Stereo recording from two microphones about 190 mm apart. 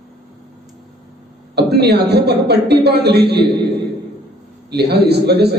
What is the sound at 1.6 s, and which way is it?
A man's voice, 60° right (ahead or behind).